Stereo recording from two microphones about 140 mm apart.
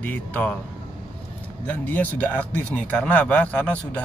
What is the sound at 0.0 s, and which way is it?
Speech, 10° left (ahead or behind).